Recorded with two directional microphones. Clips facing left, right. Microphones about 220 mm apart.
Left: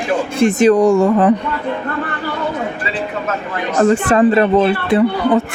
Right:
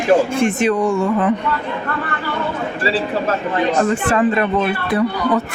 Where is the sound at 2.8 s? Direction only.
30° right (ahead or behind).